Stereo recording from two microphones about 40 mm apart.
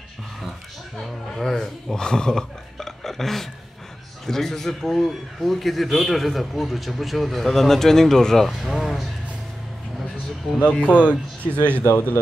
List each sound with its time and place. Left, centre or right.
0.9 s speech: centre
2.8 s a sound: centre
4.3 s a man's voice: centre
8.5 s a man's voice: centre
10.7 s speech: left
11.9 s speech: left